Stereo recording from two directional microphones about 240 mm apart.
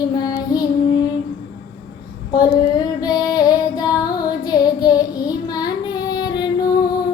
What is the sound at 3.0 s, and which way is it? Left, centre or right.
Music, centre.